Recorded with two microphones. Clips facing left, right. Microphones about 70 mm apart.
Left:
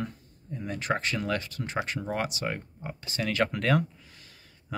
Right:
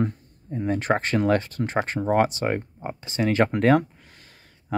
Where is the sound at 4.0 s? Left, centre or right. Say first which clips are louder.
Right 2 dB; right.